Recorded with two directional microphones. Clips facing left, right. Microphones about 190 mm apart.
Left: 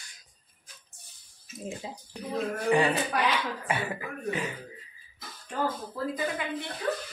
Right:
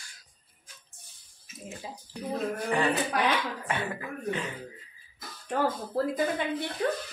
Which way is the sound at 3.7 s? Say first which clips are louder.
Left 1 dB; 10° left (ahead or behind).